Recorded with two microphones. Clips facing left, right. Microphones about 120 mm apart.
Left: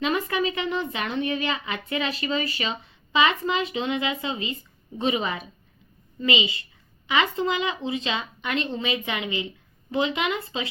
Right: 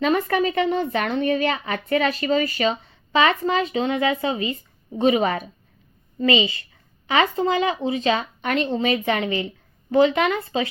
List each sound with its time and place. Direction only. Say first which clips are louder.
0.0 s speech: right 5 dB; 45° right (ahead or behind)
7.1 s speech: right 4 dB; 40° right (ahead or behind)